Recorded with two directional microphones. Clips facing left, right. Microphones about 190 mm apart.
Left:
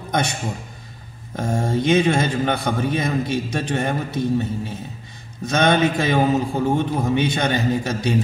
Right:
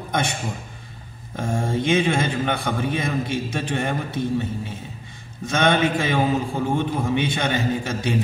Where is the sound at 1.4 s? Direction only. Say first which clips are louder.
Left 2 dB; 40° left (ahead or behind).